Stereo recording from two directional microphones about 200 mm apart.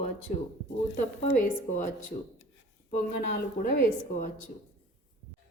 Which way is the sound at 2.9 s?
45° left (ahead or behind).